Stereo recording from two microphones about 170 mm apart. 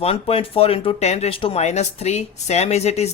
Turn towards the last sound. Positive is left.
turn(degrees=40)  # may be behind; listen again after turning